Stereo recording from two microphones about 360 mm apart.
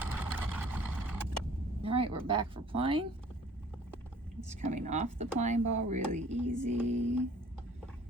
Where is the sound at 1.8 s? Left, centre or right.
Centre.